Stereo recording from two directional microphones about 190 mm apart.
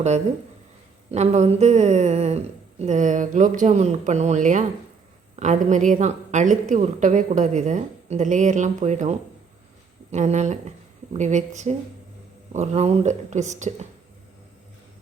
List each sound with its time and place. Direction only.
1.1 s a woman's voice: 35° right (ahead or behind)